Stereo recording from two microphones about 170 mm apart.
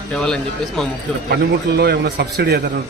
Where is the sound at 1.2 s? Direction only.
65° right (ahead or behind).